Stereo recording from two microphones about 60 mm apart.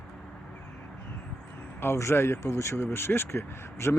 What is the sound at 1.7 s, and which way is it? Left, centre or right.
Speech, left.